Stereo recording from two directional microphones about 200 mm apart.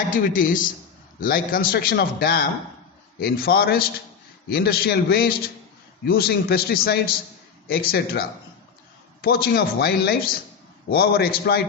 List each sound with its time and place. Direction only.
0.1 s a man's voice: 45° left (ahead or behind)